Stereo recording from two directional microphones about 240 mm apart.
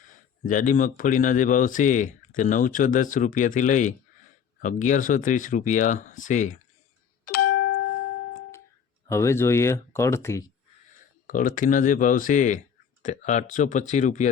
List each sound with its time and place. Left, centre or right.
0.1 s speech: left
7.3 s ding-dong: left
9.0 s speech: centre
11.3 s speech: left